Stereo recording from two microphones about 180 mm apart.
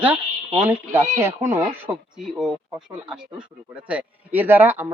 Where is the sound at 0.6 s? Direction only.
10° right (ahead or behind).